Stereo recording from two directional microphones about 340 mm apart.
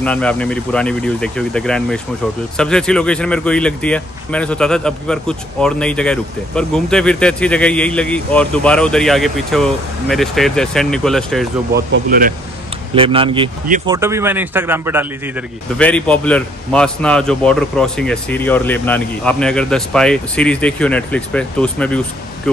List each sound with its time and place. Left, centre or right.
0.0 s a man's voice: centre
11.7 s speech: right; by 15.0 s centre
15.8 s a man's voice: centre